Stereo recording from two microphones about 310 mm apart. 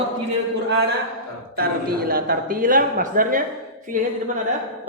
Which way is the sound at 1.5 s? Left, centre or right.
Right.